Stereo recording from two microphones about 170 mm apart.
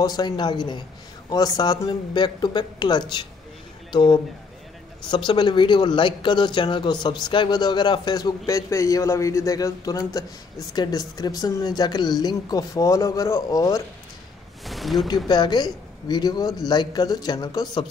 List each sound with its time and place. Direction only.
0.0 s speech: 25° left (ahead or behind)
14.6 s a sound: centre (ahead or behind)
15.2 s speech: 25° left (ahead or behind)